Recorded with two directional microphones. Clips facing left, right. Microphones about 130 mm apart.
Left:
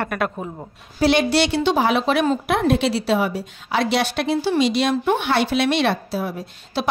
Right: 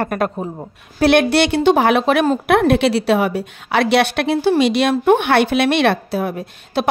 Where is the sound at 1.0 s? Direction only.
60° right (ahead or behind).